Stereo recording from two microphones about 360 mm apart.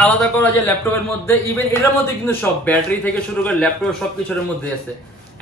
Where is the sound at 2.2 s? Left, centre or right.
Centre.